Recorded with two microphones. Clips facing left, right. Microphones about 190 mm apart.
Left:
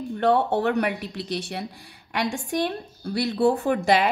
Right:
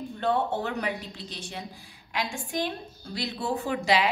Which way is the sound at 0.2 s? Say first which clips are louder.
Left 6 dB; 70° left (ahead or behind).